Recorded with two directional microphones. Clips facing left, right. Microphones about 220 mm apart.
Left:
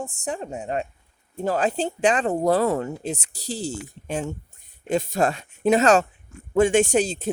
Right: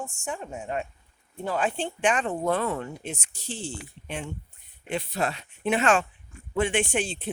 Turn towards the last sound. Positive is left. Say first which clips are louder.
# left 7 dB
turn(degrees=40)  # may be behind; listen again after turning